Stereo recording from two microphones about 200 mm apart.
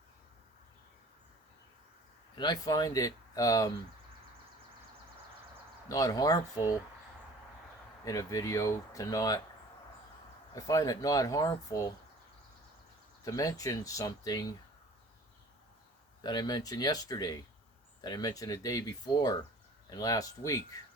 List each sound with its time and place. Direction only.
2.4 s speech: 20° left (ahead or behind)
5.9 s speech: 20° left (ahead or behind)
8.0 s speech: 15° left (ahead or behind)
10.5 s speech: 15° left (ahead or behind)
13.2 s speech: 15° left (ahead or behind)
16.2 s speech: 20° left (ahead or behind)